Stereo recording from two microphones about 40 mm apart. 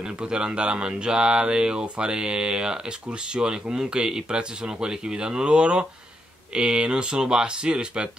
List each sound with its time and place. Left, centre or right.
0.0 s speech: right